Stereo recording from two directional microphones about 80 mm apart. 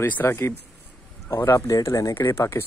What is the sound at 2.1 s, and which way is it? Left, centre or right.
Speech, left.